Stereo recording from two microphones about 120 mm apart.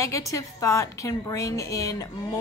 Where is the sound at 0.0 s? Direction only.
25° left (ahead or behind).